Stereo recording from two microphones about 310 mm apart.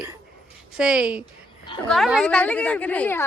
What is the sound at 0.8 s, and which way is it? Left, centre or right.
Speech, centre.